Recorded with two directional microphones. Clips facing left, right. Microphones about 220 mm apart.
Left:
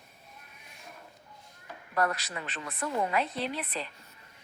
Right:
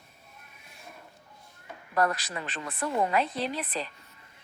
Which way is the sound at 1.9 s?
40° right (ahead or behind).